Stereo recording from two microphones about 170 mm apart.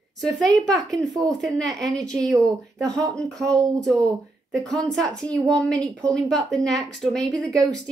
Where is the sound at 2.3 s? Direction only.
20° right (ahead or behind).